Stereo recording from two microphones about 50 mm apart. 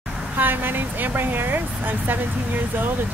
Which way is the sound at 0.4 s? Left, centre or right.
Right.